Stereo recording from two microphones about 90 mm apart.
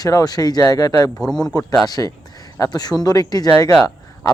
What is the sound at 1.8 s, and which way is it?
Speech, 45° left (ahead or behind).